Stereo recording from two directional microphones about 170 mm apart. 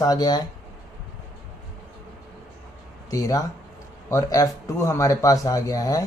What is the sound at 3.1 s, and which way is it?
Speech, 20° left (ahead or behind).